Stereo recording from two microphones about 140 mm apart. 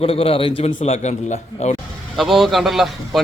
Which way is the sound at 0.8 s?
50° left (ahead or behind).